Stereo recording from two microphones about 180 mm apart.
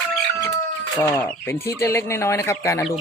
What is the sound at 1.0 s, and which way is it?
Speech, 10° left (ahead or behind).